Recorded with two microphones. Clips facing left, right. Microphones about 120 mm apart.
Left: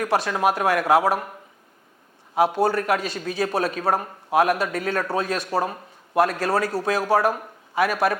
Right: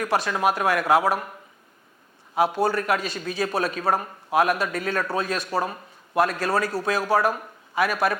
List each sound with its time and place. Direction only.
0.0 s a man's voice: 50° left (ahead or behind)